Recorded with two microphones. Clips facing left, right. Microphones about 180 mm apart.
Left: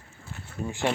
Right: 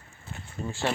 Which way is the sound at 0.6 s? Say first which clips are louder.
Left 2 dB; 10° left (ahead or behind).